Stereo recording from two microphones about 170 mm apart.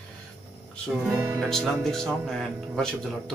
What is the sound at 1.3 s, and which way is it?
Speech, 5° left (ahead or behind).